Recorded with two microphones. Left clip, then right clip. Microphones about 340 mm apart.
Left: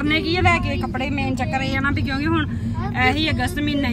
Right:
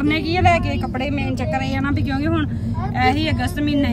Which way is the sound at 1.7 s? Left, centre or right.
Centre.